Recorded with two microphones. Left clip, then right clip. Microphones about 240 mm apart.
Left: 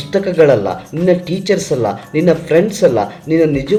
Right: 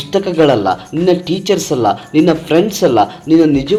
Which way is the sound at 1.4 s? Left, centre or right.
Right.